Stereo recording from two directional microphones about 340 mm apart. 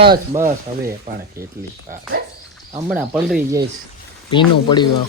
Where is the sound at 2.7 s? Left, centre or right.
Centre.